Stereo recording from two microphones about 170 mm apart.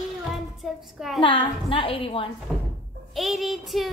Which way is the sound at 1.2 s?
30° left (ahead or behind).